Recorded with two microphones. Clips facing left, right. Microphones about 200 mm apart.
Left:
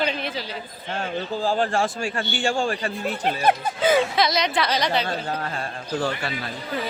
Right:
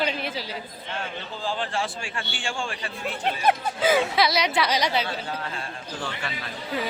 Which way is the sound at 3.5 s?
5° right (ahead or behind).